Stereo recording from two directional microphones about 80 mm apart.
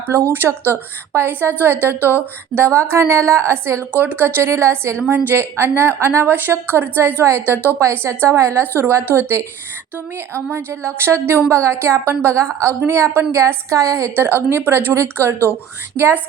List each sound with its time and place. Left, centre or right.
0.3 s a woman's voice: right
3.9 s a woman's voice: right
10.5 s a woman's voice: right